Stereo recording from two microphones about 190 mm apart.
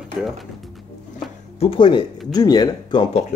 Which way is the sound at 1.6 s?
30° left (ahead or behind).